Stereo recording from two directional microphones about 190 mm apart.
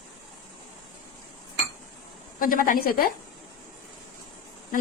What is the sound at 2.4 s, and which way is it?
Speech, 45° left (ahead or behind).